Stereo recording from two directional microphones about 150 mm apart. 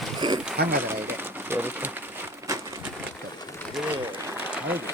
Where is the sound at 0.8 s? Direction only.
15° right (ahead or behind).